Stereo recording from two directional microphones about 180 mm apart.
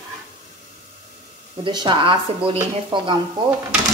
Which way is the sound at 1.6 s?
25° right (ahead or behind).